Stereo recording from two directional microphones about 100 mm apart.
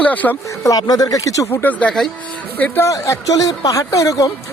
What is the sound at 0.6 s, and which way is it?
Speech, 40° left (ahead or behind).